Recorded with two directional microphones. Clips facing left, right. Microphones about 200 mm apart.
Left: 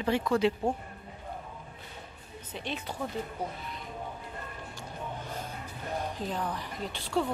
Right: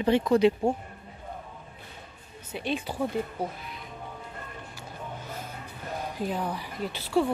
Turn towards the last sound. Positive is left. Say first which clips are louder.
# right 4 dB
turn(degrees=-5)  # may be behind; listen again after turning